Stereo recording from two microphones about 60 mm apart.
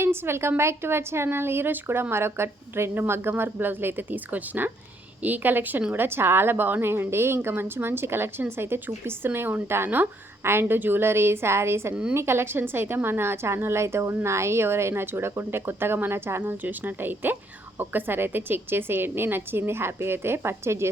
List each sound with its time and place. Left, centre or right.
0.0 s a woman's voice: right
16.4 s a woman's voice: right